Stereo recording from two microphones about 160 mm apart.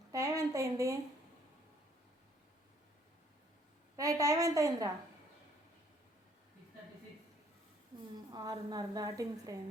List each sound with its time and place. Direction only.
0.1 s a sound: 20° right (ahead or behind)
3.9 s a woman's voice: 20° right (ahead or behind)
8.3 s a woman's voice: 25° right (ahead or behind)